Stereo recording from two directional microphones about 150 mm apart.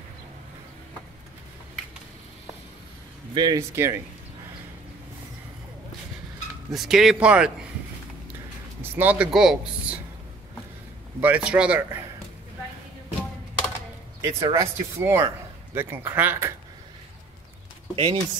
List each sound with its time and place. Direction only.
3.3 s speech: 30° right (ahead or behind)
3.7 s a man's voice: 15° right (ahead or behind)
6.7 s speech: centre (ahead or behind)
8.9 s a man's voice: 10° right (ahead or behind)
11.1 s a man's voice: 10° right (ahead or behind)
14.2 s a man's voice: 20° right (ahead or behind)
17.9 s speech: 40° right (ahead or behind)